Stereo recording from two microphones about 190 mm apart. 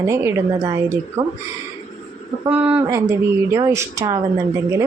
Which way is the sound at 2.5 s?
10° right (ahead or behind).